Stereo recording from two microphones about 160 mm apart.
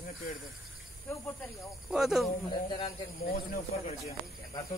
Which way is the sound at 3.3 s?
55° left (ahead or behind).